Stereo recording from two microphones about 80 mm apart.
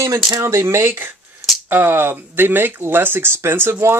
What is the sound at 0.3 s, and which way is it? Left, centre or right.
Speech, right.